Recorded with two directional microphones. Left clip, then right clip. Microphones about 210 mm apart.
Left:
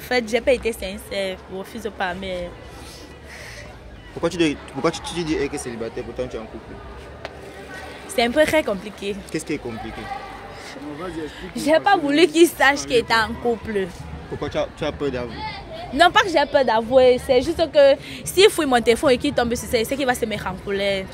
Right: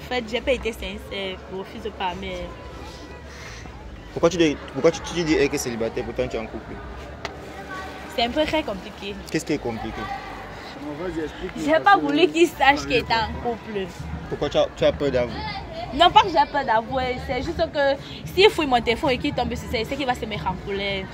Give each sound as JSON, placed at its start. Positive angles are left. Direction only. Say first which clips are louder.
{"t": 0.1, "sound": "a woman's voice", "louder": "left 5 dB", "side_deg": 45}
{"t": 4.4, "sound": "speech", "louder": "right 1 dB", "side_deg": 20}
{"t": 5.4, "sound": "speech", "louder": "right 4 dB", "side_deg": -10}
{"t": 8.2, "sound": "a woman's voice", "louder": "left 5 dB", "side_deg": 50}
{"t": 9.3, "sound": "speech", "louder": "right 6 dB", "side_deg": -5}
{"t": 11.5, "sound": "a woman's voice", "louder": "even", "side_deg": 40}
{"t": 14.4, "sound": "speech", "louder": "right 5 dB", "side_deg": 0}
{"t": 16.3, "sound": "a woman's voice", "louder": "left 2 dB", "side_deg": 55}